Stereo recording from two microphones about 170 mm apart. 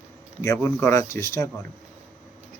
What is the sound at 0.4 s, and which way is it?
Speech, 15° left (ahead or behind).